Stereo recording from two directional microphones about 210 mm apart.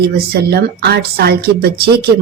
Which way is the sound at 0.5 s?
50° right (ahead or behind).